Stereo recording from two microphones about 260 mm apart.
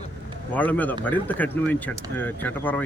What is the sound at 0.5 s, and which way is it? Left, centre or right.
Speech, centre.